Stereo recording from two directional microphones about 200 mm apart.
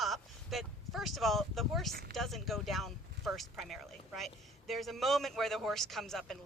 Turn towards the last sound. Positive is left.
turn(degrees=0)  # may be behind; listen again after turning